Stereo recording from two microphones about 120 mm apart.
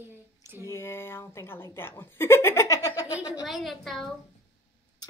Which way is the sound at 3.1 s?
10° right (ahead or behind).